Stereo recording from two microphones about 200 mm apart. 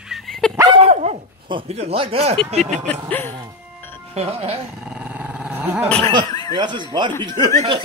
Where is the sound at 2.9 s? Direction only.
10° left (ahead or behind).